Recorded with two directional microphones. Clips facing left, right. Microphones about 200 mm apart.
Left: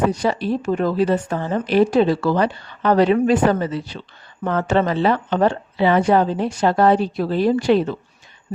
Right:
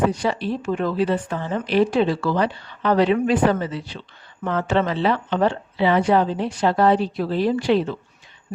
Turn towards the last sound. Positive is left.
turn(degrees=45)  # may be behind; listen again after turning